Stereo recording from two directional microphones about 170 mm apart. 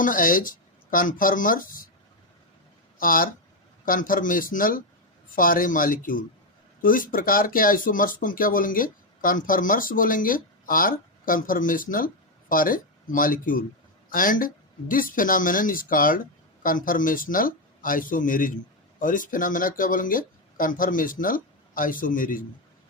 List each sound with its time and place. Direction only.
0.0 s speech: 55° left (ahead or behind)
3.0 s speech: 55° left (ahead or behind)